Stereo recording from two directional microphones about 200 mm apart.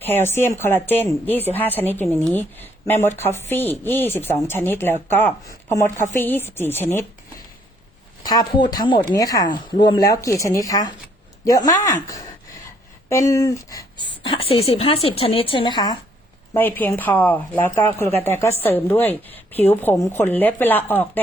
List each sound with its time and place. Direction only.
0.0 s speech: 10° left (ahead or behind)
8.3 s a woman's voice: 20° left (ahead or behind)
13.1 s a woman's voice: 15° left (ahead or behind)
16.6 s speech: 10° left (ahead or behind)